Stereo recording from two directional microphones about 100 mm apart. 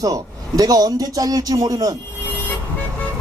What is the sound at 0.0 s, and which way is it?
Speech, 35° right (ahead or behind).